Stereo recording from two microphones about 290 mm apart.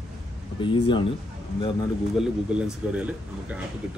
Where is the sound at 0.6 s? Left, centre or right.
Centre.